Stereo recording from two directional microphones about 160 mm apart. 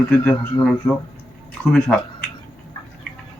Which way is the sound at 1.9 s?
Centre (ahead or behind).